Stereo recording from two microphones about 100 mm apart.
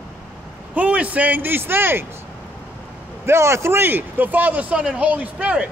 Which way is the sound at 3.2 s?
25° right (ahead or behind).